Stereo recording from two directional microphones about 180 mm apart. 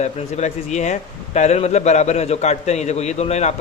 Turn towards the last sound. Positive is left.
turn(degrees=40)  # may be behind; listen again after turning